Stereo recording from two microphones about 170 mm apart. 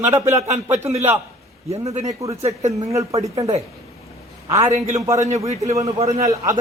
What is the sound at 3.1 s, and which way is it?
Speech, 35° right (ahead or behind).